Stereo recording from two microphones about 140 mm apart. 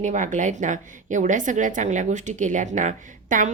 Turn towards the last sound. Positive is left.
turn(degrees=-65)  # may be behind; listen again after turning